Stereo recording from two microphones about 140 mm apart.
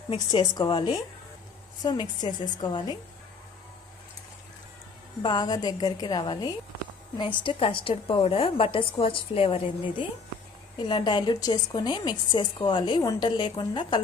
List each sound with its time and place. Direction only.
0.3 s a woman's voice: 30° left (ahead or behind)
5.2 s a woman's voice: 30° left (ahead or behind)